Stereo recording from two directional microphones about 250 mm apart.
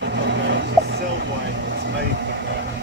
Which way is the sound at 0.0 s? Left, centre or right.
Right.